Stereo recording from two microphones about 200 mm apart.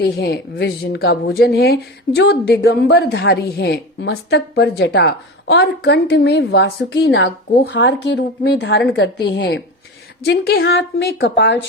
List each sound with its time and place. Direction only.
0.0 s speech: 55° left (ahead or behind)